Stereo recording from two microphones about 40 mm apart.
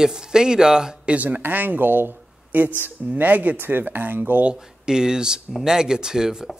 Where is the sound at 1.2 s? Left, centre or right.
Right.